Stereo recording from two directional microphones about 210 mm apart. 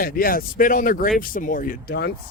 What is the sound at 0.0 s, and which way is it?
Speech, 45° left (ahead or behind).